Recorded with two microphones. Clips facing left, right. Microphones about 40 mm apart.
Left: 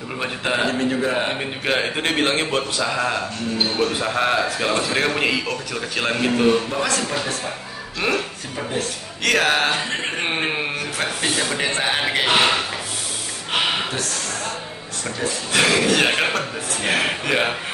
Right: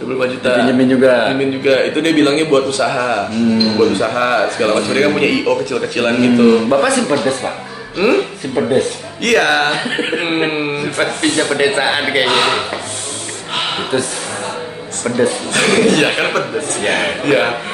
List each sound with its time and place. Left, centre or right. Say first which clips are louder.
0.4 s a man's voice: right 7 dB; centre
0.7 s speech: right 11 dB; right
1.3 s a man's voice: right 9 dB; centre
2.8 s a man's voice: right 7 dB; centre
4.1 s a man's voice: right 5 dB; centre
8.0 s speech: right 9 dB; right
9.2 s a man's voice: right 6 dB; centre
9.8 s a man's voice: right 6 dB; centre
11.5 s speech: right 7 dB; centre
12.3 s a man's voice: right 3 dB; centre
13.6 s a sound: right 1 dB; centre
15.0 s speech: right 11 dB; right
15.5 s a man's voice: right 4 dB; centre